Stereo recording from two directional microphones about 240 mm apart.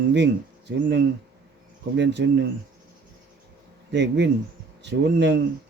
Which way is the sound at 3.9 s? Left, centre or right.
Right.